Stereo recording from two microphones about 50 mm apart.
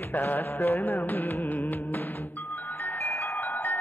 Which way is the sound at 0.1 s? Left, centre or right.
Left.